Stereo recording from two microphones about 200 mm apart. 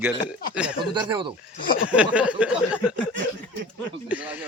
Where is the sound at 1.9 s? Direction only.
5° right (ahead or behind).